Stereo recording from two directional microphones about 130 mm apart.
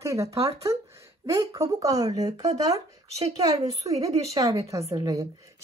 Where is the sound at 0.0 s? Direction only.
25° right (ahead or behind).